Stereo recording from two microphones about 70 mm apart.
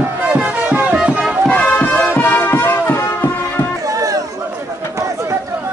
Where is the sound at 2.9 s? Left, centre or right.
Left.